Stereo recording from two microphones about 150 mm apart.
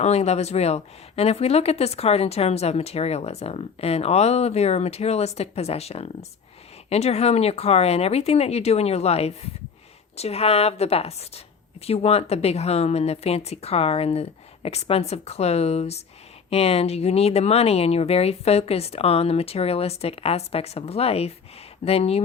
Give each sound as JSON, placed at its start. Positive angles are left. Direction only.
{"t": 0.0, "sound": "speech", "side_deg": 45}